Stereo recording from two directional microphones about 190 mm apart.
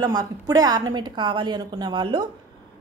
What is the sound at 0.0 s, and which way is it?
Speech, 20° right (ahead or behind).